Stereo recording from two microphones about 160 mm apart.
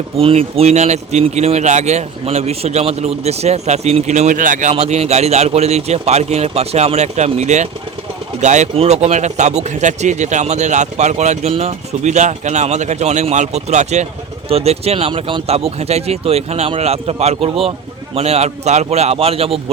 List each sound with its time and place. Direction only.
0.2 s speech: 35° right (ahead or behind); by 4.7 s 55° right (ahead or behind)
4.7 s speech: 40° right (ahead or behind)